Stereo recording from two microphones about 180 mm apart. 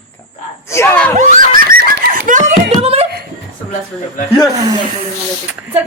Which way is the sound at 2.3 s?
45° right (ahead or behind).